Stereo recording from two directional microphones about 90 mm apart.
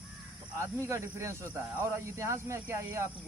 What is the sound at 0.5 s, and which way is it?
Speech, 30° right (ahead or behind).